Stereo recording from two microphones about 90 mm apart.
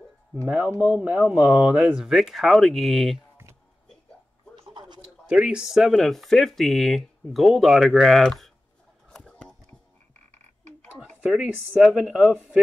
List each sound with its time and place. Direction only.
0.7 s speech: 15° right (ahead or behind)
4.6 s a sound: 55° right (ahead or behind)
5.3 s speech: 10° right (ahead or behind); by 8.5 s 5° left (ahead or behind)
9.1 s a sound: 10° left (ahead or behind)
11.1 s speech: 10° right (ahead or behind)
11.4 s speech: 20° right (ahead or behind)